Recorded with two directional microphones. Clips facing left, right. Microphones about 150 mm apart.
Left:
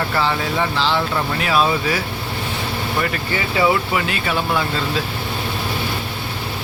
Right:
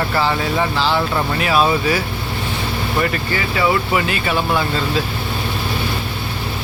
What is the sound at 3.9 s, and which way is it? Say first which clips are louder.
Speech: right 2 dB; 5° right (ahead or behind).